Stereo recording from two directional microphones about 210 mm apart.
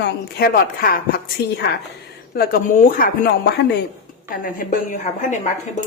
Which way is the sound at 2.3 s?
45° left (ahead or behind).